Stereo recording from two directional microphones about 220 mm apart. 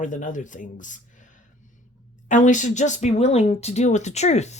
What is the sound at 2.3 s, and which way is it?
Speech, 35° left (ahead or behind).